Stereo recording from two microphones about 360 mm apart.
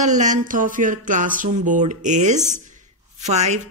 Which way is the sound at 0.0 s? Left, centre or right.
Centre.